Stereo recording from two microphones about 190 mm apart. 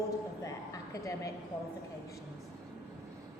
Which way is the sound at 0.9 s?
15° left (ahead or behind).